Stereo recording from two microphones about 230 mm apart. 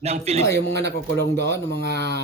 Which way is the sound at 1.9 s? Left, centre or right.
Right.